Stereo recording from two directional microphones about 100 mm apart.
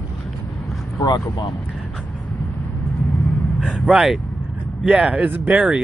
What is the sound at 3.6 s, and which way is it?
Speech, 10° right (ahead or behind).